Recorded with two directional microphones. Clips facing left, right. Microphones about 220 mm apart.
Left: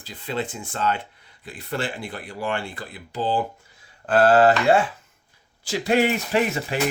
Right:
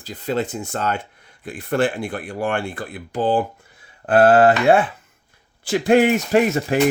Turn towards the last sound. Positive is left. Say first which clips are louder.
# right 6 dB
turn(degrees=-45)  # may be behind; listen again after turning